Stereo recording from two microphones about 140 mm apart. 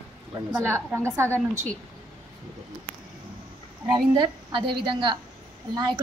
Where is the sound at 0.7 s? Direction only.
20° right (ahead or behind).